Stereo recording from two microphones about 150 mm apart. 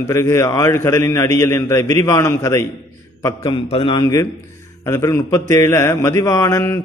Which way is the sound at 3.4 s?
35° left (ahead or behind).